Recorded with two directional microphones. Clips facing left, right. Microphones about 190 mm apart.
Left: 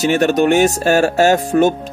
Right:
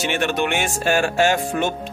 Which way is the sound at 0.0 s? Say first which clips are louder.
Left 8 dB; 40° left (ahead or behind).